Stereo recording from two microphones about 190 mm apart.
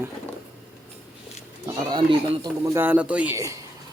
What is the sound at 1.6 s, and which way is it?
Speech, 20° right (ahead or behind).